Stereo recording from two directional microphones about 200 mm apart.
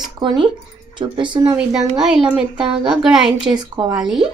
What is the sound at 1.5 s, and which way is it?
A woman's voice, 5° right (ahead or behind).